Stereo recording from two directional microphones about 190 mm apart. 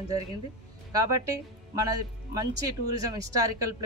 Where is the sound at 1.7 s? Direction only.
20° right (ahead or behind).